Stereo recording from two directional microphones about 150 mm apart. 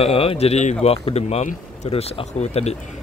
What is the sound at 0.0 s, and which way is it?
Speech, 40° left (ahead or behind).